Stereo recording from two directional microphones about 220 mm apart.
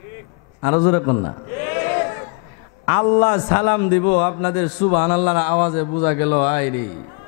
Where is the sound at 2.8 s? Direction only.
20° left (ahead or behind).